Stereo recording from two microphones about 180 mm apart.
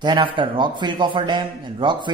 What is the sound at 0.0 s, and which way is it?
A man's voice, 25° right (ahead or behind).